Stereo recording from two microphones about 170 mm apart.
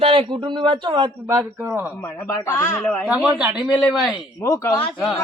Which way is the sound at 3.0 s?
5° right (ahead or behind).